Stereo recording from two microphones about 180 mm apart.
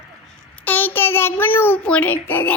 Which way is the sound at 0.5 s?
10° left (ahead or behind).